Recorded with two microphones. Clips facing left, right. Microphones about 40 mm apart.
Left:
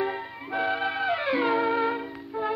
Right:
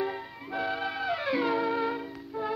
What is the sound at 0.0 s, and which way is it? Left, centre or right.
Music, left.